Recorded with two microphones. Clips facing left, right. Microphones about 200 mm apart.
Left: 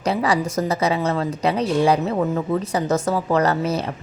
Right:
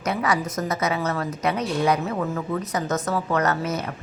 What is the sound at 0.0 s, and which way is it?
A woman's voice, 30° left (ahead or behind).